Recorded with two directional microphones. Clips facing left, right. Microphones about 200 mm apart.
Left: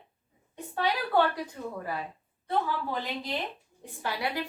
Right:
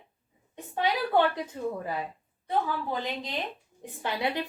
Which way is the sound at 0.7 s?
20° right (ahead or behind).